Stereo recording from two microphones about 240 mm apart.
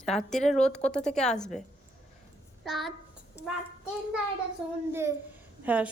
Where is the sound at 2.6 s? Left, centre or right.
Centre.